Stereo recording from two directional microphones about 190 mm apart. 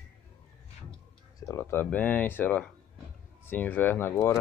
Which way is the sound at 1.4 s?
15° left (ahead or behind).